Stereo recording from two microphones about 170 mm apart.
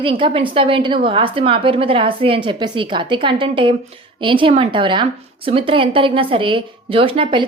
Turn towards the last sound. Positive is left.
turn(degrees=-30)  # may be behind; listen again after turning